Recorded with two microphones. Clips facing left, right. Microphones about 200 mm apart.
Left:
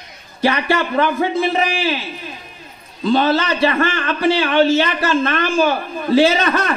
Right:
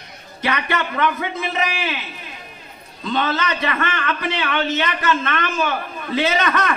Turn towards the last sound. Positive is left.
turn(degrees=30)  # may be behind; listen again after turning